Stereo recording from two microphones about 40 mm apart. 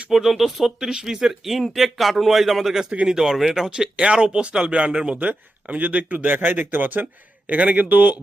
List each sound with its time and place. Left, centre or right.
0.1 s speech: centre
0.8 s speech: centre
3.7 s speech: right
5.6 s speech: right